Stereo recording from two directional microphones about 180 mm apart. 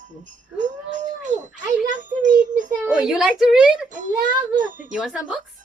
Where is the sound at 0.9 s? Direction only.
45° right (ahead or behind).